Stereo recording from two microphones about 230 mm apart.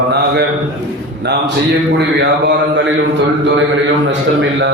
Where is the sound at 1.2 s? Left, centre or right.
Right.